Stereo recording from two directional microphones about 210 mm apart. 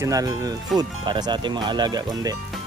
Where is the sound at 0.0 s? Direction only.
15° right (ahead or behind).